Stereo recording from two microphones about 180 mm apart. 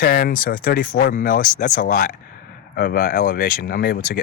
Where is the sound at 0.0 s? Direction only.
55° left (ahead or behind).